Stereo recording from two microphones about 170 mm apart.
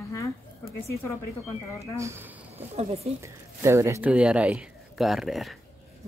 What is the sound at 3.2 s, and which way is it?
Speech, 15° right (ahead or behind).